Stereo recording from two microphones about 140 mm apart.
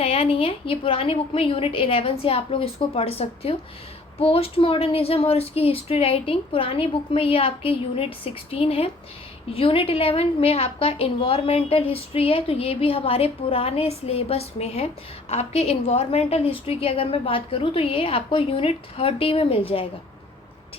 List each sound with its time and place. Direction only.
0.0 s a woman's voice: 45° left (ahead or behind)